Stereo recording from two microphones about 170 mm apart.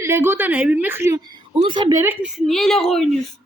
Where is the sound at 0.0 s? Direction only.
15° right (ahead or behind).